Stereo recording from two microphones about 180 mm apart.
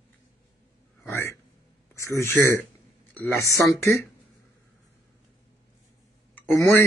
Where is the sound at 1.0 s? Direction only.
15° left (ahead or behind).